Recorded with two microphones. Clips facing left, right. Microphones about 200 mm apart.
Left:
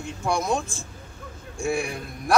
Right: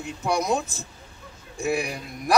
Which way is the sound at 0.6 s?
20° right (ahead or behind).